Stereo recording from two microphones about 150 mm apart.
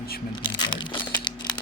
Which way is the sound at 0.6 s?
30° left (ahead or behind).